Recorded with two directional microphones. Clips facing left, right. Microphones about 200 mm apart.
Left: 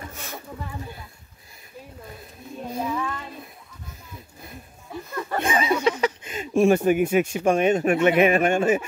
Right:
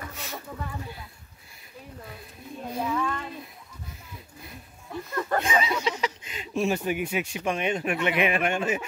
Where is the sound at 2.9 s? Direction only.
5° left (ahead or behind).